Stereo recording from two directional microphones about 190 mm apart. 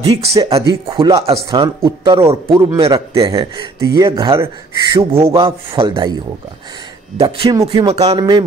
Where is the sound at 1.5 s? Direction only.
20° right (ahead or behind).